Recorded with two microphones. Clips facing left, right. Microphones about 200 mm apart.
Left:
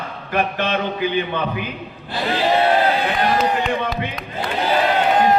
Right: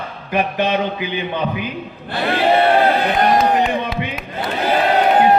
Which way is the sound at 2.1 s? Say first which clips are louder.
Right 3 dB; 60° right (ahead or behind).